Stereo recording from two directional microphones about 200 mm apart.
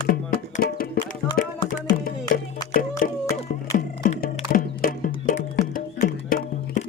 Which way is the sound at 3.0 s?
45° left (ahead or behind).